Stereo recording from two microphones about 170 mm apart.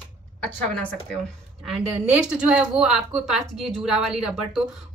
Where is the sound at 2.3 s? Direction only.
5° right (ahead or behind).